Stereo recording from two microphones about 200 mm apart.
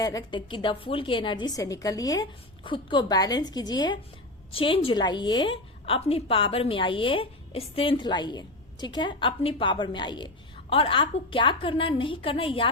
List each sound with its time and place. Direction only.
0.0 s a woman's voice: 20° left (ahead or behind)